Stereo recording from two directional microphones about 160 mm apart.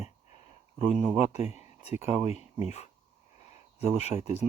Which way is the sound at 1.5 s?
40° left (ahead or behind).